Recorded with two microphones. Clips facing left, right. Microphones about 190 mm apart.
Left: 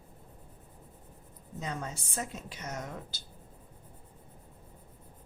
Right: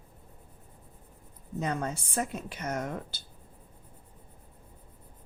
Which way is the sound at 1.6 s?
60° right (ahead or behind).